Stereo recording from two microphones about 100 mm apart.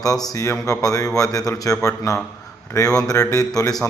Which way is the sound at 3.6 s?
35° left (ahead or behind).